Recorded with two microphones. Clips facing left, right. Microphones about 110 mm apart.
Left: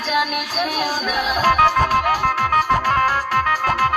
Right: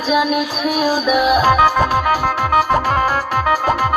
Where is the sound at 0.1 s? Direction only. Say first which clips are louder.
Right 5 dB; 10° right (ahead or behind).